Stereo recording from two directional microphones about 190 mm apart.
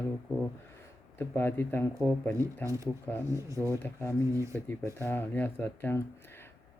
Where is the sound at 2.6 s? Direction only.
15° right (ahead or behind).